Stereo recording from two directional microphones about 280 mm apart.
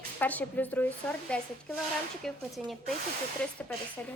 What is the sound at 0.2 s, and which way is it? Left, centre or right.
A woman's voice, centre.